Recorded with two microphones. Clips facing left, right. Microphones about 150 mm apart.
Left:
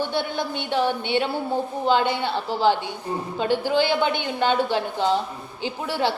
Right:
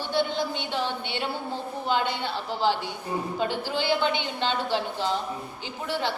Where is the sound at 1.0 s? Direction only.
55° left (ahead or behind).